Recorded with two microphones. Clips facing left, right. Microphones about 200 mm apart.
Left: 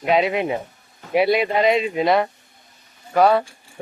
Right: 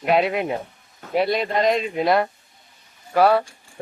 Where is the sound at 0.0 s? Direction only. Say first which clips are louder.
Left 1 dB; centre (ahead or behind).